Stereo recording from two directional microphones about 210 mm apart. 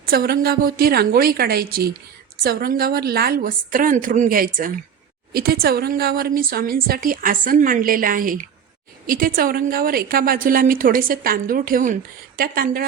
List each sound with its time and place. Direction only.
0.0 s a woman's voice: 45° right (ahead or behind)